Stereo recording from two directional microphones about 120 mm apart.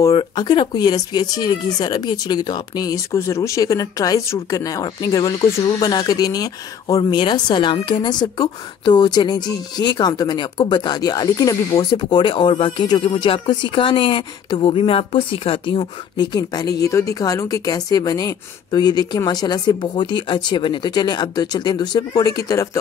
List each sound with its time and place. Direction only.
0.0 s speech: 35° left (ahead or behind)